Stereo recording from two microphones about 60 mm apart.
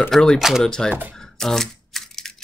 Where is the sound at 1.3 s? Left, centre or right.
Centre.